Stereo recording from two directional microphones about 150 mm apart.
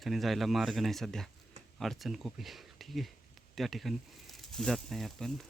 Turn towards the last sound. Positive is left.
turn(degrees=0)  # may be behind; listen again after turning